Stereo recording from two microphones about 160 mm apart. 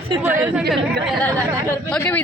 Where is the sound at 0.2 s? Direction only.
10° right (ahead or behind).